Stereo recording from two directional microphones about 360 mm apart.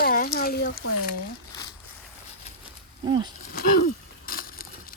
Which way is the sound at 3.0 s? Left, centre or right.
Centre.